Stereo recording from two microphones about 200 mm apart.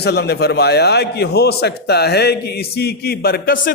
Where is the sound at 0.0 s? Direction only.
55° left (ahead or behind).